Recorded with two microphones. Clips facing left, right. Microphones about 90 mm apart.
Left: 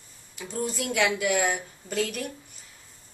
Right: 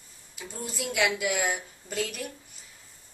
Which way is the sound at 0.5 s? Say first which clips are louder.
Left 3 dB; 5° right (ahead or behind).